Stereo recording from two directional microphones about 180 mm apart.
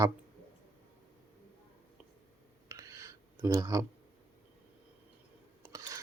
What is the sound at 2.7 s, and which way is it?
Clicking, 15° right (ahead or behind).